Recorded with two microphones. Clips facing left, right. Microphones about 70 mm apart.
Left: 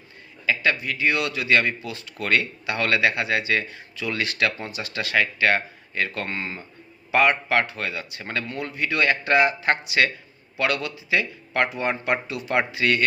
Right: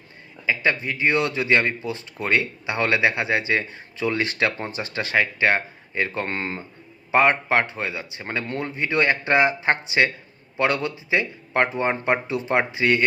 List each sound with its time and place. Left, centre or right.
0.4 s speech: right
6.2 s speech: right